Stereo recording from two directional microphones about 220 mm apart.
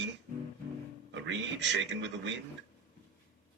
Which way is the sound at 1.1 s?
55° right (ahead or behind).